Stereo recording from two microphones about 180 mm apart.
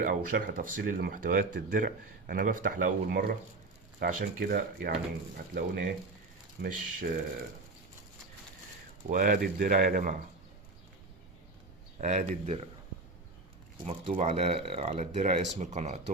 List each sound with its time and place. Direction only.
0.0 s speech: 50° right (ahead or behind)
9.0 s speech: 50° right (ahead or behind)
11.9 s speech: 40° right (ahead or behind)
13.8 s speech: 40° right (ahead or behind)